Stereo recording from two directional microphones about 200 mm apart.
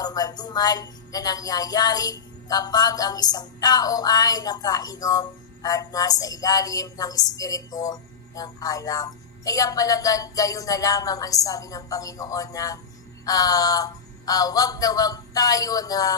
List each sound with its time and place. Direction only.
0.0 s music: 20° left (ahead or behind)